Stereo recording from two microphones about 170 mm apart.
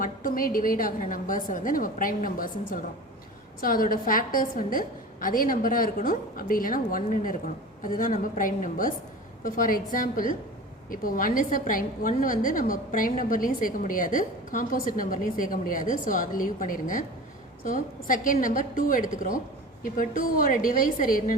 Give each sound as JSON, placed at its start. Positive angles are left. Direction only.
{"t": 0.0, "sound": "a woman's voice", "side_deg": 55}